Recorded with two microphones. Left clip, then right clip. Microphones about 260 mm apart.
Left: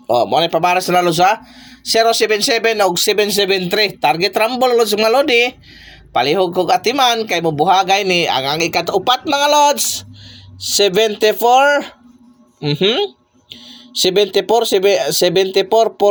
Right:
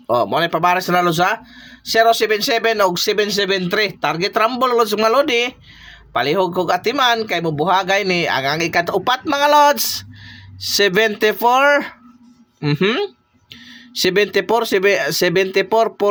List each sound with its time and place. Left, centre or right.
0.1 s speech: centre